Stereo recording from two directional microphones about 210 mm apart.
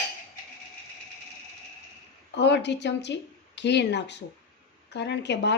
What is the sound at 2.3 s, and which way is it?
Speech, 55° left (ahead or behind).